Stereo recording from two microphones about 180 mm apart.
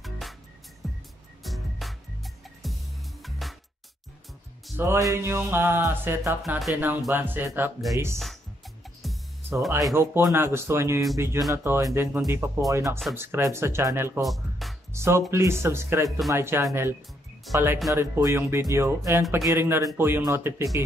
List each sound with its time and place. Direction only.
0.0 s music: centre (ahead or behind)
4.7 s music: 15° right (ahead or behind)
6.4 s music: centre (ahead or behind)
9.0 s music: centre (ahead or behind)
9.9 s music: 15° right (ahead or behind)
14.2 s music: centre (ahead or behind)
14.9 s speech: 15° right (ahead or behind)
15.3 s music: 15° right (ahead or behind)
17.9 s music: 15° right (ahead or behind)